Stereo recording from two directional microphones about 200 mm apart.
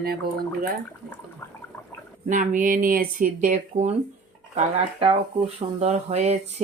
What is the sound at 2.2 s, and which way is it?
Speech, 40° right (ahead or behind).